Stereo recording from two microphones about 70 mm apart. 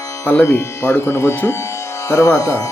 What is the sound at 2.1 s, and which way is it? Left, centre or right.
Speech, left.